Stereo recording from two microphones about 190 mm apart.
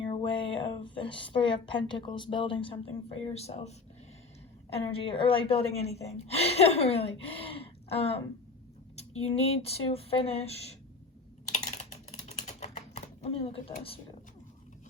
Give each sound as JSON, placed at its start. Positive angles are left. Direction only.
{"t": 0.0, "sound": "speech", "side_deg": 25}
{"t": 12.3, "sound": "typing", "side_deg": 35}